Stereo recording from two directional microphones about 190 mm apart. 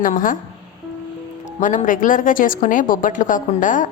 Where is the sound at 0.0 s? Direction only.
45° left (ahead or behind).